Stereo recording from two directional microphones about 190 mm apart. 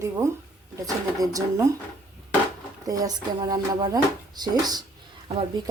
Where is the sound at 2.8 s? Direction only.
20° right (ahead or behind).